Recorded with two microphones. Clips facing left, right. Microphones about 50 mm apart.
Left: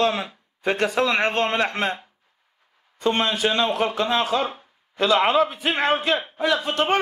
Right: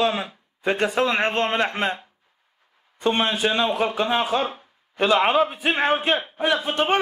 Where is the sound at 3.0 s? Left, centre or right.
Left.